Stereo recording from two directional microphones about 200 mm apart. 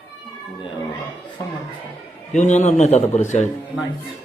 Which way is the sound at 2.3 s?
35° left (ahead or behind).